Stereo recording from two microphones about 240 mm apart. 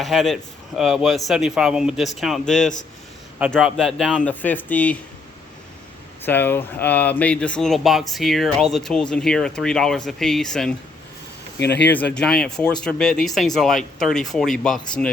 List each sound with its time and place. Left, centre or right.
0.0 s speech: centre
6.2 s speech: centre
11.6 s speech: left
11.9 s speech: centre